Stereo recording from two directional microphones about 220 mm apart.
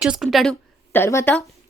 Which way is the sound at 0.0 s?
Centre (ahead or behind).